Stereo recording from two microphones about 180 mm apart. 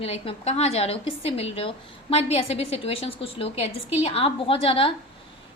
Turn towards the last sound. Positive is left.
turn(degrees=30)  # may be behind; listen again after turning